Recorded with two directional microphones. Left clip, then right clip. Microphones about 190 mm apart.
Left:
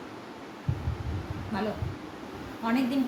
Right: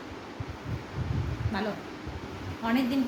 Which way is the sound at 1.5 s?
30° right (ahead or behind).